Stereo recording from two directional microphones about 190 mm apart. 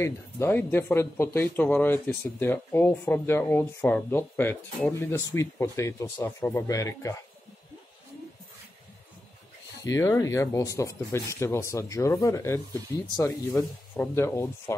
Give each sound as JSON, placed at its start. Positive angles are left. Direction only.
{"t": 0.0, "sound": "speech", "side_deg": 10}
{"t": 9.8, "sound": "speech", "side_deg": 15}